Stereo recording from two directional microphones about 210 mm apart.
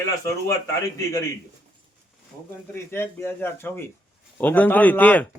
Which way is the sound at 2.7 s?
10° left (ahead or behind).